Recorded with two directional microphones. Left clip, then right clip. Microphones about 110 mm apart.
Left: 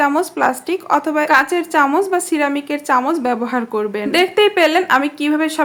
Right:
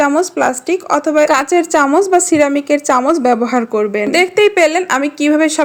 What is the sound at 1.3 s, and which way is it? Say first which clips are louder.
A woman's voice: right 2 dB; 50° right (ahead or behind).